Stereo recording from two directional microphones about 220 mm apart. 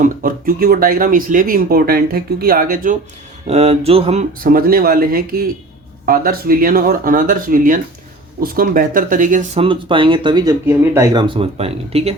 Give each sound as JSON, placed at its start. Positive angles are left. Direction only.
{"t": 0.0, "sound": "speech", "side_deg": -40}
{"t": 3.4, "sound": "speech", "side_deg": -30}
{"t": 9.6, "sound": "speech", "side_deg": -25}